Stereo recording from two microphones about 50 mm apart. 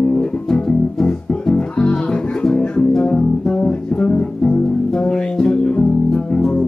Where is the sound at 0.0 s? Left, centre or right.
Centre.